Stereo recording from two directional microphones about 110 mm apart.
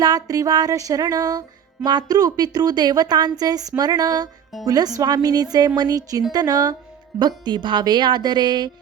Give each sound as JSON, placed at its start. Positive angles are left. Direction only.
{"t": 0.0, "sound": "music", "side_deg": -35}